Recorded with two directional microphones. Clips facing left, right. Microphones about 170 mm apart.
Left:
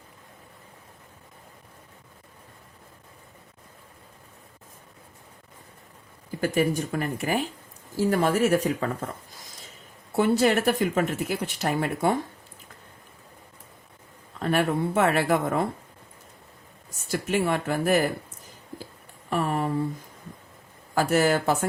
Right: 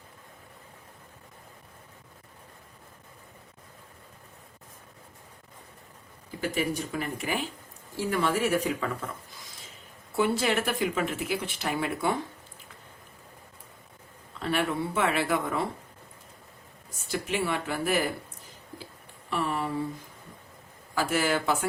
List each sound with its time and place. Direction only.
6.4 s speech: 45° left (ahead or behind)
14.3 s speech: 45° left (ahead or behind)
17.1 s speech: 45° left (ahead or behind)
19.3 s speech: 45° left (ahead or behind)
20.9 s speech: 45° left (ahead or behind)